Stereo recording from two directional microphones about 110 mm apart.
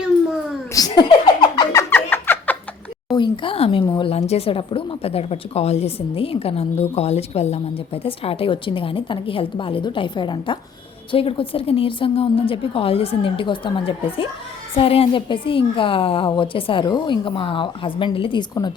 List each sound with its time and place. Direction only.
0.7 s chuckle: 35° left (ahead or behind)
1.7 s a sound: 20° left (ahead or behind)
3.1 s a woman's voice: 45° left (ahead or behind)
4.2 s a woman's voice: 70° left (ahead or behind); by 16.8 s 55° left (ahead or behind)
16.8 s a woman's voice: 45° left (ahead or behind)